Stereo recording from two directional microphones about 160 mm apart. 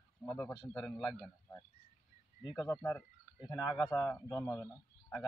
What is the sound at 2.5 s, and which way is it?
Speech, 15° left (ahead or behind).